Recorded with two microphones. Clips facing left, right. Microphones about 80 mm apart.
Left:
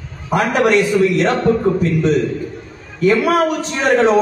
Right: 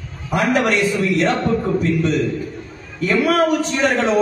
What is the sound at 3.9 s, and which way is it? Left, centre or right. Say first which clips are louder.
Speech: left 7 dB; left.